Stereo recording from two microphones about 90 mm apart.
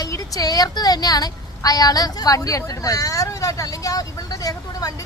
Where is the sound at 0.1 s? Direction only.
40° left (ahead or behind).